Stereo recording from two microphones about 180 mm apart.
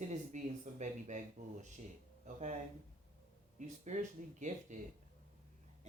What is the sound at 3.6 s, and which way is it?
Speech, 45° right (ahead or behind).